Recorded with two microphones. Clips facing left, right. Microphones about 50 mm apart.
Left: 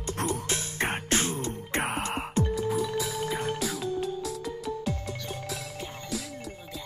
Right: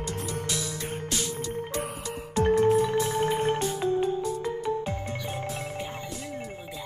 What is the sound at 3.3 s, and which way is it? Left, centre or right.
Music, right.